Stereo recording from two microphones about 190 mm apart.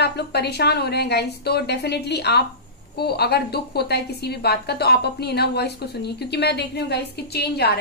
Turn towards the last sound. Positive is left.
turn(degrees=60)  # may be behind; listen again after turning